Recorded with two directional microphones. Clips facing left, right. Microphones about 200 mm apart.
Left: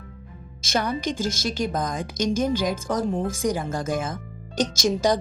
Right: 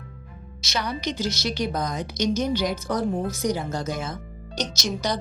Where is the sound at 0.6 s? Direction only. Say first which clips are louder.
Left 3 dB; 50° left (ahead or behind).